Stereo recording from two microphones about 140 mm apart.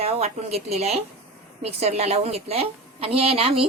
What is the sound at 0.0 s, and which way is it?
A woman's voice, 50° right (ahead or behind).